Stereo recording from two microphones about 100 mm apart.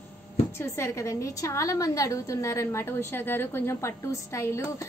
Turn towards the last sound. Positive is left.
turn(degrees=25)  # may be behind; listen again after turning